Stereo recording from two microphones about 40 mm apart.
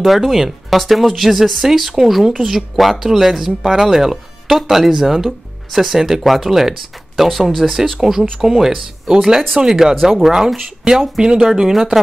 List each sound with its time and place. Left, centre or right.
0.0 s speech: centre
8.0 s speech: centre
11.7 s speech: centre